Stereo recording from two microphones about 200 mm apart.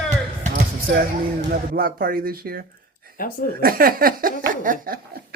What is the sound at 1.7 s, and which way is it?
Speech, 45° right (ahead or behind).